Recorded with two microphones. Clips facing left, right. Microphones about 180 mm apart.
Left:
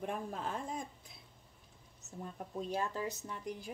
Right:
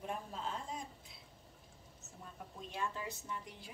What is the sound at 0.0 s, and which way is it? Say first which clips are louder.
Speech: left 3 dB; 55° left (ahead or behind).